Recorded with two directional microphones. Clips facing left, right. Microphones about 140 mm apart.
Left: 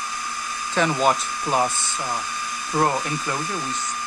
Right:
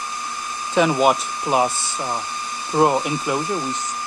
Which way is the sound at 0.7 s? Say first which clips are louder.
Right 4 dB; 15° right (ahead or behind).